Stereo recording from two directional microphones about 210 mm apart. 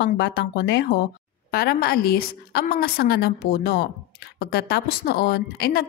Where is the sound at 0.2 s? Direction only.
55° left (ahead or behind).